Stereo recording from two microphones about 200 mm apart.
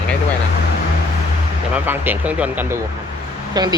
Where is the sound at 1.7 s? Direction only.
10° right (ahead or behind).